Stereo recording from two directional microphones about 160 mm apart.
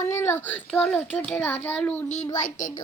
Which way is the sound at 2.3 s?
55° left (ahead or behind).